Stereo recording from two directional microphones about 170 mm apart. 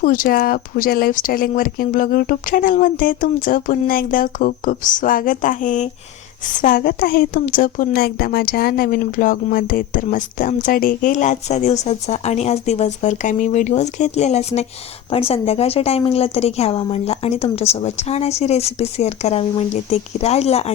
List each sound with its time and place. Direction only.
0.0 s a woman's voice: 55° left (ahead or behind); by 20.7 s 35° left (ahead or behind)